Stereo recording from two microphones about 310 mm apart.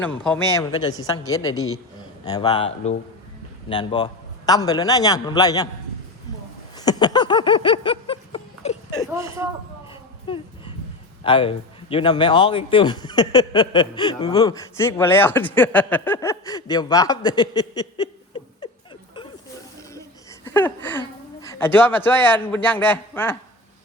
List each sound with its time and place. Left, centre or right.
0.3 s a man's voice: centre
6.7 s a sound: centre
9.0 s speech: centre
9.9 s a sound: centre
11.2 s a man's voice: centre
20.4 s speech: centre